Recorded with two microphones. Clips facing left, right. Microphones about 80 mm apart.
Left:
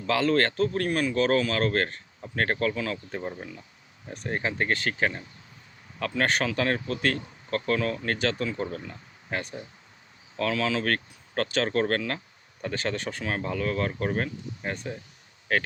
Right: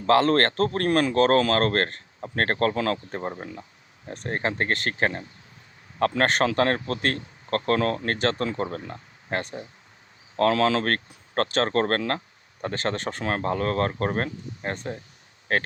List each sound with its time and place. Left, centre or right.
0.0 s speech: right
3.1 s speech: right
3.4 s speech: right